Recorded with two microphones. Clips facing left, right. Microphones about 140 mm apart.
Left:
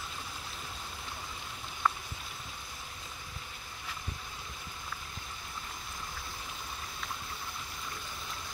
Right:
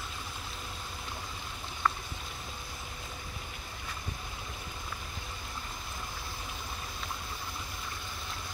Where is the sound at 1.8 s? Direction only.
10° left (ahead or behind).